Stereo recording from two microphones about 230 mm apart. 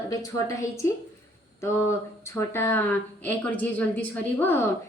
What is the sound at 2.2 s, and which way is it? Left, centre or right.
A woman's voice, centre.